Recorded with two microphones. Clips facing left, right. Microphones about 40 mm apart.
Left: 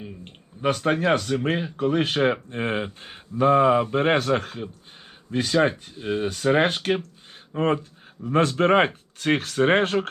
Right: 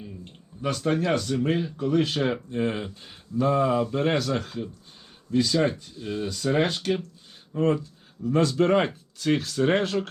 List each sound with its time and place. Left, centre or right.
0.0 s speech: left